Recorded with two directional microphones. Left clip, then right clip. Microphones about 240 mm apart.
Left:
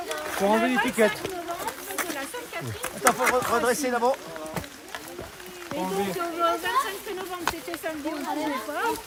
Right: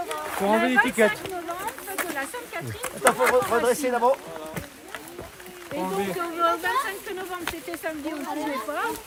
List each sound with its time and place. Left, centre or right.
0.1 s speech: centre
3.0 s speech: right
3.6 s speech: right
5.7 s speech: centre